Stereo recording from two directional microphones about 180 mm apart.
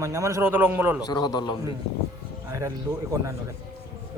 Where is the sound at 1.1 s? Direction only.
25° left (ahead or behind).